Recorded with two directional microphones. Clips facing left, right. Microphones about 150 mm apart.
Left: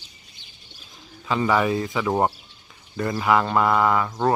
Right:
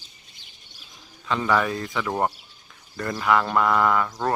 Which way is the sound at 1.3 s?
5° left (ahead or behind).